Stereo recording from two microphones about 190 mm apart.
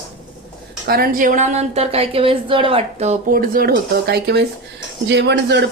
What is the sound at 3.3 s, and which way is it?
Speech, 50° right (ahead or behind).